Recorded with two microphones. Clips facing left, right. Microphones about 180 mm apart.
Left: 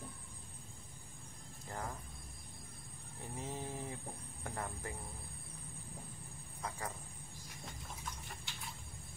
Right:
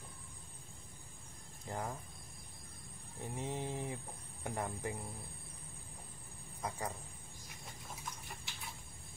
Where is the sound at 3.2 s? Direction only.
20° right (ahead or behind).